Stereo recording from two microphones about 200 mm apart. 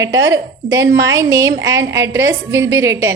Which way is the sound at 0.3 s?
15° right (ahead or behind).